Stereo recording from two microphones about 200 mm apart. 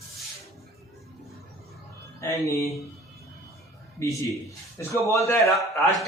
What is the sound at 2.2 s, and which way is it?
Speech, 15° left (ahead or behind).